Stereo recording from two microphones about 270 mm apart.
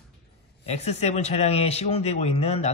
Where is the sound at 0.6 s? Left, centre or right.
Left.